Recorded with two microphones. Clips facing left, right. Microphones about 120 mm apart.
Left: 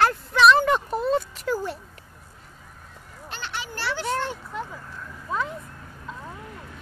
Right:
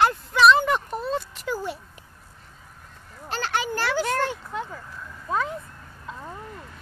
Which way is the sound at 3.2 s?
90° right.